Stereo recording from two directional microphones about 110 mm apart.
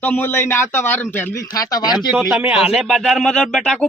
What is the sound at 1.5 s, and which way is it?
Speech, 35° left (ahead or behind).